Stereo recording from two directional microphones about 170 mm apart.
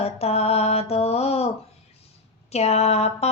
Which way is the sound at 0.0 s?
35° left (ahead or behind).